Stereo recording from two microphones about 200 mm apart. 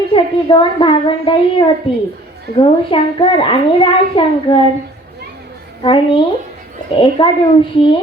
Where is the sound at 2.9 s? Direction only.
25° left (ahead or behind).